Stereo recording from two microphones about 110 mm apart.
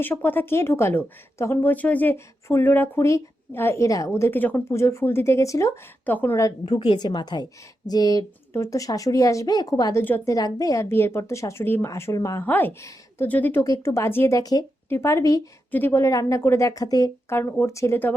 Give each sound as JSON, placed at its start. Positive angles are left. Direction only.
{"t": 0.0, "sound": "speech", "side_deg": 15}
{"t": 6.1, "sound": "speech", "side_deg": 15}
{"t": 6.3, "sound": "speech", "side_deg": 30}
{"t": 6.7, "sound": "speech", "side_deg": 45}
{"t": 10.0, "sound": "speech", "side_deg": 15}
{"t": 10.2, "sound": "speech", "side_deg": 35}
{"t": 12.5, "sound": "speech", "side_deg": 15}
{"t": 12.8, "sound": "speech", "side_deg": 30}
{"t": 13.2, "sound": "speech", "side_deg": 15}
{"t": 14.3, "sound": "speech", "side_deg": 35}
{"t": 14.8, "sound": "speech", "side_deg": 25}
{"t": 17.2, "sound": "speech", "side_deg": 25}